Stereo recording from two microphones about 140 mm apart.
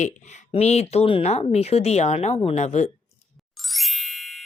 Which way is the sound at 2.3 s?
40° left (ahead or behind).